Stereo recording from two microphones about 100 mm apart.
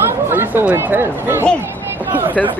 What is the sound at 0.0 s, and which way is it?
Speech, 20° right (ahead or behind).